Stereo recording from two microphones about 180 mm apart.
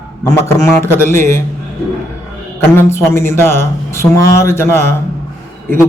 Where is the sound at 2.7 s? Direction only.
15° left (ahead or behind).